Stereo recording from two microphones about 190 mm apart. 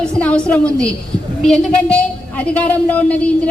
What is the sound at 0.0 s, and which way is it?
A woman's voice, 5° left (ahead or behind).